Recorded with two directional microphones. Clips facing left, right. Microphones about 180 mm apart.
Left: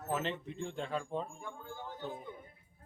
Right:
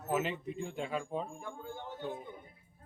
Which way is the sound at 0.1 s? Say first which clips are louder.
Right 3 dB; 10° right (ahead or behind).